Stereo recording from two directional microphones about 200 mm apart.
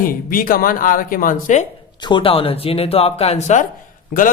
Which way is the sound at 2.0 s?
25° left (ahead or behind).